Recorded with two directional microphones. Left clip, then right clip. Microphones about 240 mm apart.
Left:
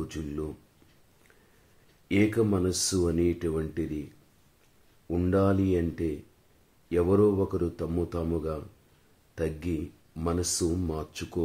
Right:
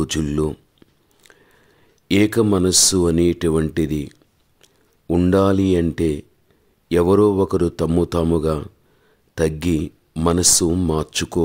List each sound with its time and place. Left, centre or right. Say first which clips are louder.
0.0 s speech: right 14 dB; right
2.0 s speech: right 9 dB; right
5.1 s speech: right 10 dB; right